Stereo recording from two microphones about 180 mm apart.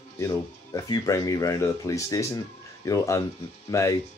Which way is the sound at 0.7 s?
20° left (ahead or behind).